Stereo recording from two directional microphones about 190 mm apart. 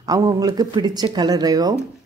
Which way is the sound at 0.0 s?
20° right (ahead or behind).